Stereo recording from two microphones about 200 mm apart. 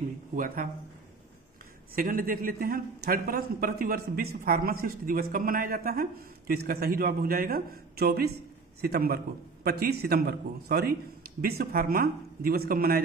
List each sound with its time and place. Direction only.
2.0 s a man's voice: 45° right (ahead or behind)